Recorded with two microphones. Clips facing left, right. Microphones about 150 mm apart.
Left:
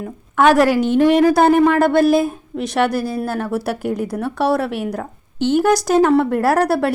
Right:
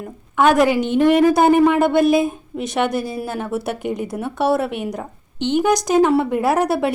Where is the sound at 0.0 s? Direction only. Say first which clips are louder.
Left 2 dB; centre (ahead or behind).